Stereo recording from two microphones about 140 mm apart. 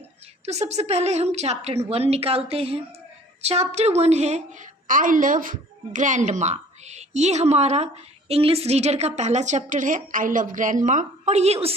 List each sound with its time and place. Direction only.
0.4 s a woman's voice: 50° right (ahead or behind)
4.9 s a woman's voice: 70° right (ahead or behind); by 11.7 s 50° right (ahead or behind)